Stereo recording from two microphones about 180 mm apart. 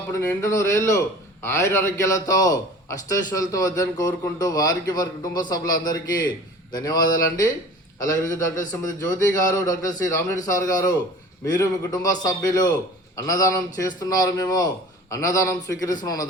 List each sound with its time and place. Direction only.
0.1 s a man's voice: 15° left (ahead or behind)